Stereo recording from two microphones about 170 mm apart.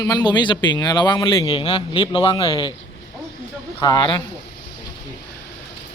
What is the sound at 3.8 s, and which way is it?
Speech, 25° left (ahead or behind).